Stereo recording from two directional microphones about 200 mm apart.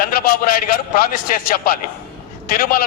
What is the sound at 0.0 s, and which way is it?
A man's voice, 45° left (ahead or behind).